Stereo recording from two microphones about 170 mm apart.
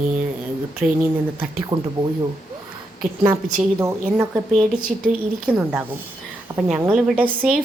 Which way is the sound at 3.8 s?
10° right (ahead or behind).